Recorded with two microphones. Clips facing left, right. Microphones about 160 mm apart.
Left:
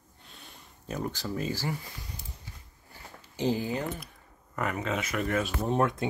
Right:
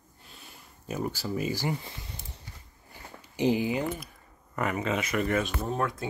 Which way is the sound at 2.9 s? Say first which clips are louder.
Right 3 dB; 15° right (ahead or behind).